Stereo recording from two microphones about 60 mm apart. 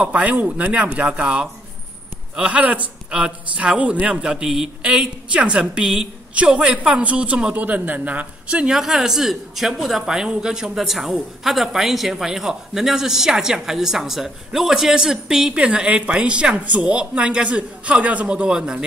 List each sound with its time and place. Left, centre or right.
0.0 s speech: right
7.5 s speech: right